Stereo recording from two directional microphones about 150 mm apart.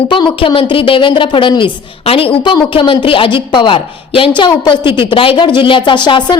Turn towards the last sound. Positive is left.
turn(degrees=30)  # may be behind; listen again after turning